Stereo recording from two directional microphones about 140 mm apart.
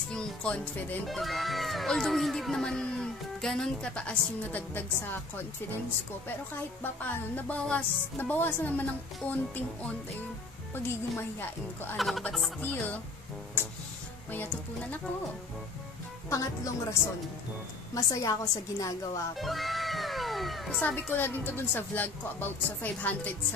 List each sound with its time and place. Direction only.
0.1 s speech: 5° left (ahead or behind)
6.8 s speech: 15° left (ahead or behind)
10.7 s speech: 15° left (ahead or behind)
12.0 s speech: centre (ahead or behind)
12.5 s speech: 10° left (ahead or behind)
14.3 s speech: 15° left (ahead or behind)
16.3 s a woman's voice: 25° left (ahead or behind)
17.9 s a woman's voice: 25° left (ahead or behind)
19.3 s music: centre (ahead or behind)
20.8 s speech: 10° left (ahead or behind)